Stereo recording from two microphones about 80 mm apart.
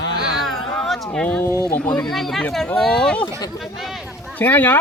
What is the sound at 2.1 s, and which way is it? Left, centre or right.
Speech, centre.